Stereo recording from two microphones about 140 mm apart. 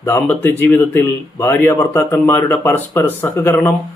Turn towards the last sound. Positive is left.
turn(degrees=15)  # may be behind; listen again after turning